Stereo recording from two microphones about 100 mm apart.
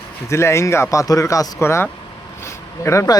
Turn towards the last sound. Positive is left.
turn(degrees=30)  # may be behind; listen again after turning